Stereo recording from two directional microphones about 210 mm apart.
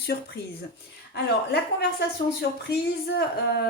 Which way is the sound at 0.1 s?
40° left (ahead or behind).